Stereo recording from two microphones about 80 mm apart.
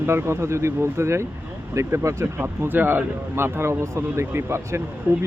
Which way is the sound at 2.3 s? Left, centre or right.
Right.